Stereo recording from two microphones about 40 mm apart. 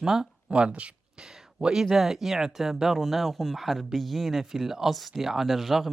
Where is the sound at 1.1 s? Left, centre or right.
Centre.